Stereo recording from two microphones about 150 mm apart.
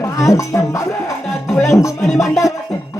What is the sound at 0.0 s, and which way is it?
Speech, 20° left (ahead or behind).